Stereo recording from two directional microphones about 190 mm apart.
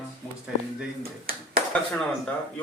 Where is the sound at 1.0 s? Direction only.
50° right (ahead or behind).